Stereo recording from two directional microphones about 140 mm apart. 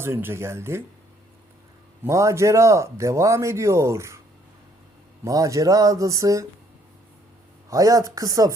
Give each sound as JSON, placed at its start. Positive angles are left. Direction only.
{"t": 0.0, "sound": "speech", "side_deg": -15}
{"t": 2.0, "sound": "speech", "side_deg": -20}
{"t": 5.2, "sound": "speech", "side_deg": -25}
{"t": 7.7, "sound": "speech", "side_deg": -25}